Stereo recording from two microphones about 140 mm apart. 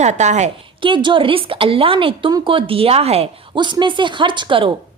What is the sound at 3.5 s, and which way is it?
A woman's voice, 35° right (ahead or behind).